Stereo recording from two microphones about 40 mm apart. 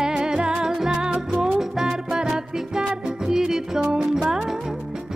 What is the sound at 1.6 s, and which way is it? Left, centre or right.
Music, centre.